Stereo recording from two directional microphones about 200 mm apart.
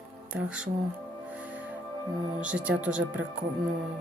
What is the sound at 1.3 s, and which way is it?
Music, 5° right (ahead or behind).